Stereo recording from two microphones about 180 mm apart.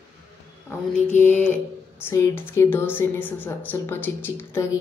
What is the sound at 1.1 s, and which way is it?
A woman's voice, 10° left (ahead or behind).